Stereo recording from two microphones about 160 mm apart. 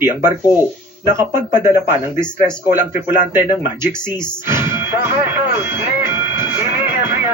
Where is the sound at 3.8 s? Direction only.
15° right (ahead or behind).